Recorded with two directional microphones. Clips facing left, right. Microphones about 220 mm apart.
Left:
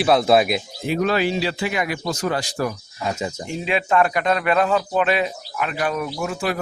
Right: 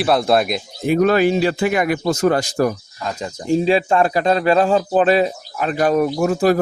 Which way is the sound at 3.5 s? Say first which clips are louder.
Right 9 dB; 35° right (ahead or behind).